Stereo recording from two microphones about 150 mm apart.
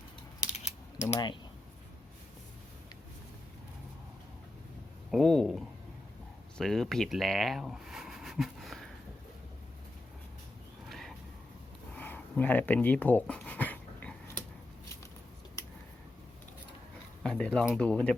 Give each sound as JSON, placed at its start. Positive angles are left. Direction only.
{"t": 0.5, "sound": "mechanisms", "side_deg": 45}
{"t": 5.1, "sound": "speech", "side_deg": 0}
{"t": 10.8, "sound": "a sound", "side_deg": 0}
{"t": 17.2, "sound": "speech", "side_deg": 5}